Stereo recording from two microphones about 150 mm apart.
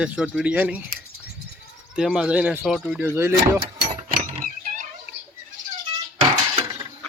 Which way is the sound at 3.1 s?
15° right (ahead or behind).